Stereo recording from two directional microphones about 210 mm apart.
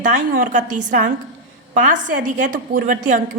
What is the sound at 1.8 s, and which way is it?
A woman's voice, 40° right (ahead or behind).